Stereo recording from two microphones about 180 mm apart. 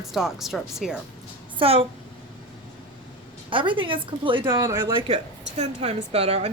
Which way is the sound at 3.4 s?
30° right (ahead or behind).